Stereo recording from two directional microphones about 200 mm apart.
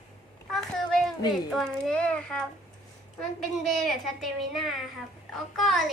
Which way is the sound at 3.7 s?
Centre (ahead or behind).